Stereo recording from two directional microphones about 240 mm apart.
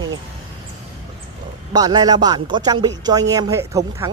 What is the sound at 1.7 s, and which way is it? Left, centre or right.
Speech, centre.